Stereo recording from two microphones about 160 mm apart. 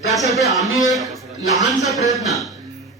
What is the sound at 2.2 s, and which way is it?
Speech, centre (ahead or behind).